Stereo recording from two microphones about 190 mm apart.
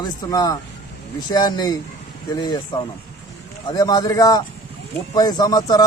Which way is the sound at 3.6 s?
20° left (ahead or behind).